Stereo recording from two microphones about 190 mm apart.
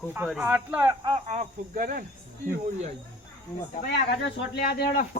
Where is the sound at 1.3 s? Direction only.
40° right (ahead or behind).